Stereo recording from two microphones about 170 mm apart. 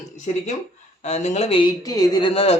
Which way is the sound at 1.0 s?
40° left (ahead or behind).